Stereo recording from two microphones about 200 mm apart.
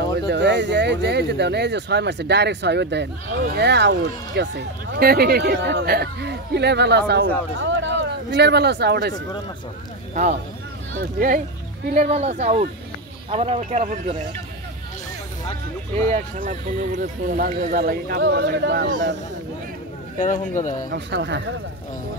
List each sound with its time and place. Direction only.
0.3 s speech: 60° right (ahead or behind)
11.1 s speech: 45° right (ahead or behind)
16.1 s speech: 40° right (ahead or behind)
17.6 s speech: 50° right (ahead or behind)
20.2 s speech: 40° left (ahead or behind)
20.9 s speech: 60° right (ahead or behind)